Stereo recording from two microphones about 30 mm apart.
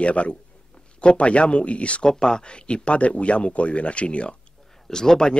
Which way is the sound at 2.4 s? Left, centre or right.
Left.